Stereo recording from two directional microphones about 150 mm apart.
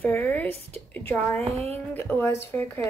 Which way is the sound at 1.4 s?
45° right (ahead or behind).